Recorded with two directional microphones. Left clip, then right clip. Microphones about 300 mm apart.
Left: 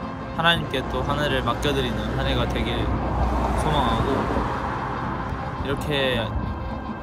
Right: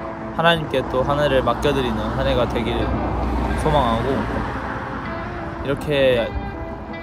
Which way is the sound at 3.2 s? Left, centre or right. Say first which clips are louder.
Even; centre.